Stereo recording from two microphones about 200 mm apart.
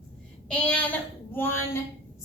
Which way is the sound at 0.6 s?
10° left (ahead or behind).